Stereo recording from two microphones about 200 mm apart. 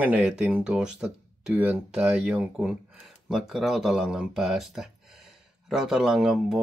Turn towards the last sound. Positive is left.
turn(degrees=0)  # may be behind; listen again after turning